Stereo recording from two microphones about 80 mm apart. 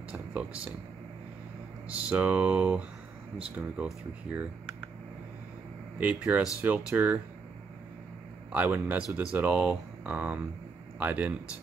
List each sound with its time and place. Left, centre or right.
0.1 s speech: centre
1.9 s speech: centre
5.9 s speech: centre
8.5 s speech: right